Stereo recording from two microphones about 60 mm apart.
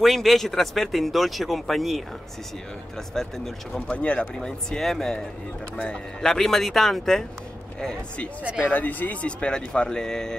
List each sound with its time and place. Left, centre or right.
0.0 s speech: centre
3.2 s speech: centre
3.8 s speech: left
4.4 s a man's voice: centre
6.2 s a man's voice: centre
8.6 s a man's voice: left; by 10.3 s centre